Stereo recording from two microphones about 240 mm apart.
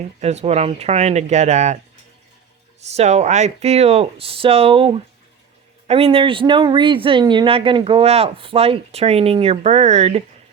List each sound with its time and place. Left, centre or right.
0.2 s speech: right
2.9 s speech: right